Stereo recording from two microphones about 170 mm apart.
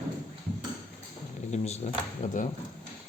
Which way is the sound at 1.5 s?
40° left (ahead or behind).